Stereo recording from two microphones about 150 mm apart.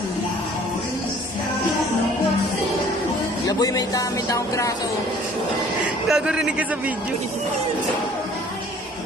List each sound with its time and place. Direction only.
3.6 s speech: 25° left (ahead or behind)
5.8 s a man's voice: 5° right (ahead or behind)